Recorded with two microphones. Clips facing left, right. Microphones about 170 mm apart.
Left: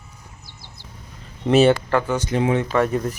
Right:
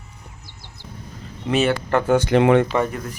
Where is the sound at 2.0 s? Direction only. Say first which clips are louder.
Right 6 dB; 55° right (ahead or behind).